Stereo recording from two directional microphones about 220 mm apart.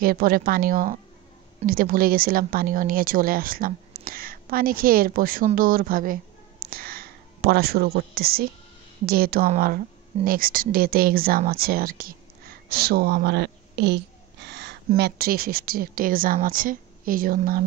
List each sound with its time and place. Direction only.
0.0 s speech: 40° right (ahead or behind)
6.6 s a sound: 45° right (ahead or behind)
9.0 s a woman's voice: 45° right (ahead or behind)